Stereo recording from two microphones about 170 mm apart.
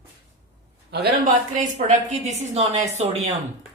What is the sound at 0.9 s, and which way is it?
Speech, 70° right (ahead or behind).